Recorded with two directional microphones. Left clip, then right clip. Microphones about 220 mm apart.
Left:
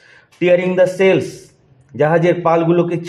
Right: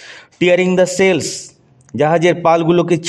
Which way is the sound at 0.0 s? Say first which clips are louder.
Right 2 dB; 35° right (ahead or behind).